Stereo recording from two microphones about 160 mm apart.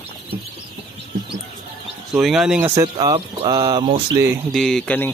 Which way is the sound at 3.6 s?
35° right (ahead or behind).